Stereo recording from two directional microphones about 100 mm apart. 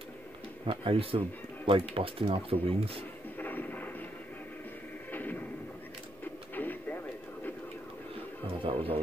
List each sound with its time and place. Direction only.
0.7 s speech: 60° right (ahead or behind)
3.3 s a sound: 20° left (ahead or behind)
5.1 s music: 20° left (ahead or behind)
6.5 s radio: 20° left (ahead or behind)
8.6 s music: 65° right (ahead or behind)